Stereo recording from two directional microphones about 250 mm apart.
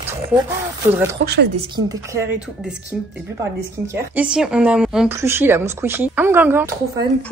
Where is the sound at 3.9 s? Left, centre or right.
Centre.